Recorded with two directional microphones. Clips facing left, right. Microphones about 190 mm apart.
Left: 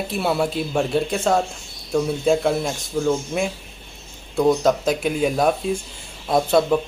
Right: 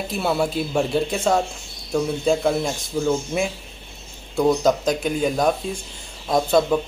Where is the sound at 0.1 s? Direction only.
Centre (ahead or behind).